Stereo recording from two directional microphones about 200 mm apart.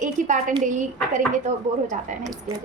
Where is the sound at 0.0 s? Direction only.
40° right (ahead or behind).